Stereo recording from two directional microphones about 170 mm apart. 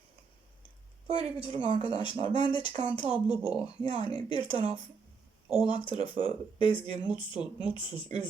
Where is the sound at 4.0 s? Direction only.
30° left (ahead or behind).